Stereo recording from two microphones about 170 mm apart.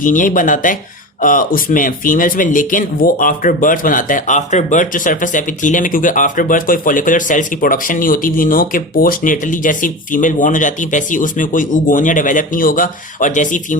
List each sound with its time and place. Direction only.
0.0 s speech: 50° left (ahead or behind)